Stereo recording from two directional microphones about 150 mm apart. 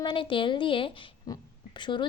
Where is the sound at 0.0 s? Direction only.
35° left (ahead or behind).